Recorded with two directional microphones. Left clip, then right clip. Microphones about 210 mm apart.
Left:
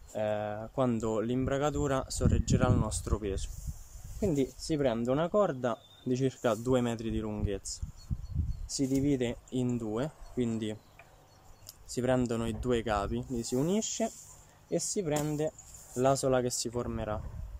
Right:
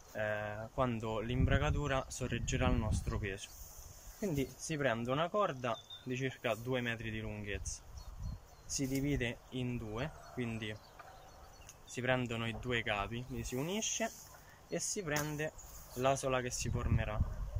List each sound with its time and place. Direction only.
0.1 s speech: 20° left (ahead or behind)
8.7 s speech: 20° left (ahead or behind)
11.9 s speech: 20° left (ahead or behind)